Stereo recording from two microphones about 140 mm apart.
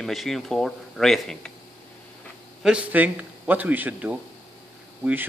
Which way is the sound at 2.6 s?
10° right (ahead or behind).